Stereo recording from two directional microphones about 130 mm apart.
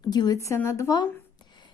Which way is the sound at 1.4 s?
35° left (ahead or behind).